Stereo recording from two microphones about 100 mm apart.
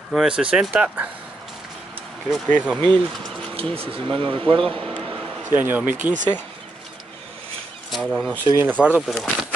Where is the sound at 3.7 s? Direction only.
65° right (ahead or behind).